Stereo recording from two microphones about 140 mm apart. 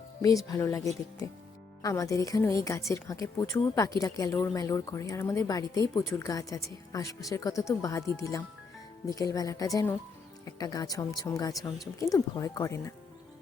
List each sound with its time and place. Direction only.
0.4 s a woman's voice: 25° left (ahead or behind)